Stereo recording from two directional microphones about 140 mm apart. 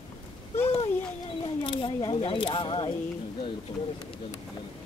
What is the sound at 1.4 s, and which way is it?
Speech, 40° left (ahead or behind).